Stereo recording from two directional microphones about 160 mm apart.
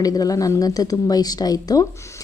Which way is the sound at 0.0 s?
20° left (ahead or behind).